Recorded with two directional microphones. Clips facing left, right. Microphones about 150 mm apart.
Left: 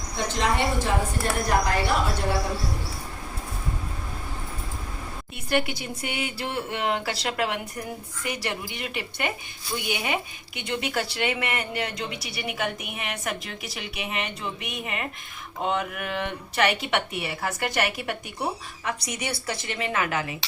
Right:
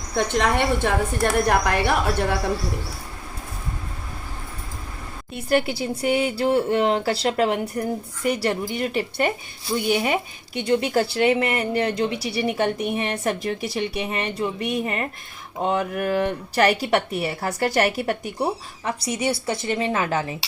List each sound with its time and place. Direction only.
0.2 s a woman's voice: 60° right (ahead or behind)
5.5 s a woman's voice: 35° right (ahead or behind)